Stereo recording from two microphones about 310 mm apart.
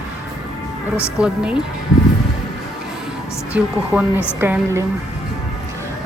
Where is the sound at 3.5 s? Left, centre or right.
Centre.